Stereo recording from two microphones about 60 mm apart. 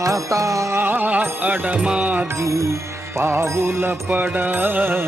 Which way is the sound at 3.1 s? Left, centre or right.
Right.